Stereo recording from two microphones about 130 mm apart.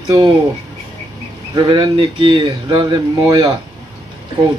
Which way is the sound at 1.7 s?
45° right (ahead or behind).